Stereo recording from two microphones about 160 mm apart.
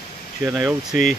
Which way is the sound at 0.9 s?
55° left (ahead or behind).